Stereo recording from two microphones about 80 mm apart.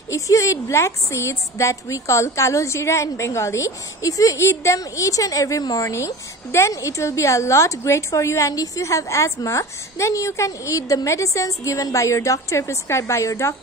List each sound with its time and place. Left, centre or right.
0.1 s a woman's voice: left